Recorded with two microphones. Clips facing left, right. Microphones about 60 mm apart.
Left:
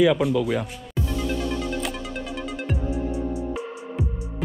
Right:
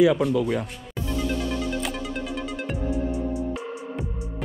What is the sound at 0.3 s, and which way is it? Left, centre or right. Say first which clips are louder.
Speech: left 1 dB; left.